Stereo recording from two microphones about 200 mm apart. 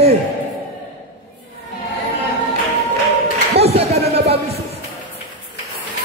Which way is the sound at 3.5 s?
30° right (ahead or behind).